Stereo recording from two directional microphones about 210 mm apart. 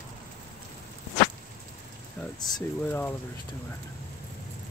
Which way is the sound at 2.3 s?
20° left (ahead or behind).